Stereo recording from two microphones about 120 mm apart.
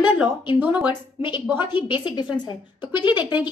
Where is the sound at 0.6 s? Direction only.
15° right (ahead or behind).